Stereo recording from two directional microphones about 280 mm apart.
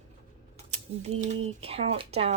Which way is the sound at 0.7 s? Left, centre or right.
Right.